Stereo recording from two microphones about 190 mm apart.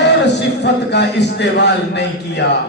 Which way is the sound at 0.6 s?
65° left (ahead or behind).